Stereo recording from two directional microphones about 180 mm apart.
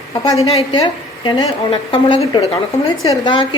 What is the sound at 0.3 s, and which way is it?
A woman's voice, 25° left (ahead or behind).